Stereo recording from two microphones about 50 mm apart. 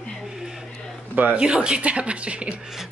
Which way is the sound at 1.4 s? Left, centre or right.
Centre.